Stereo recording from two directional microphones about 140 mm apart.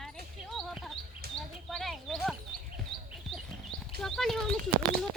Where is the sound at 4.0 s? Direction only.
5° left (ahead or behind).